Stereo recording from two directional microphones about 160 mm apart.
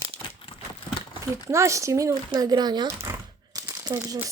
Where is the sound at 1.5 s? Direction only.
20° right (ahead or behind).